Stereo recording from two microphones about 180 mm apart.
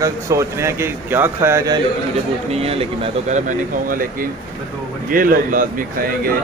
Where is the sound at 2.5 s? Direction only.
35° right (ahead or behind); by 6.4 s 55° right (ahead or behind).